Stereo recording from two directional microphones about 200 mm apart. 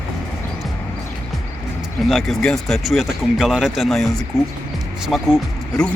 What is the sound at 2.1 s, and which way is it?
Speech, centre (ahead or behind).